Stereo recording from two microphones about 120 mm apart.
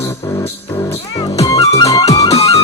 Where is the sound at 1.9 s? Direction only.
30° left (ahead or behind).